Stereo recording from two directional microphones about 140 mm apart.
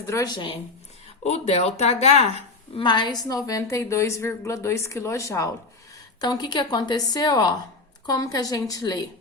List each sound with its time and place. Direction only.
0.0 s speech: 25° left (ahead or behind)
1.2 s speech: 50° left (ahead or behind)
2.7 s a woman's voice: 35° left (ahead or behind)